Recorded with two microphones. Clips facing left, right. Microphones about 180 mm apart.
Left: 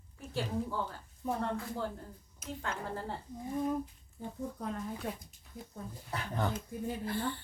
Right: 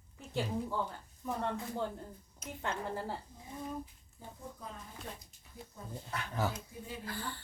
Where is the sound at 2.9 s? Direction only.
5° right (ahead or behind).